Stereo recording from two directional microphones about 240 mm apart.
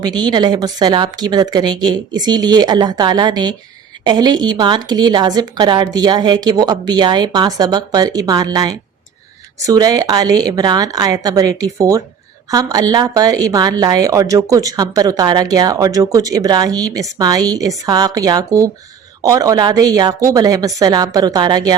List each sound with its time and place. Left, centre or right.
0.0 s a woman's voice: centre